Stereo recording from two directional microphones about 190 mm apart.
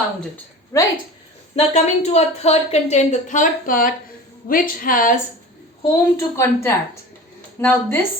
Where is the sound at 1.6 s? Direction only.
35° left (ahead or behind).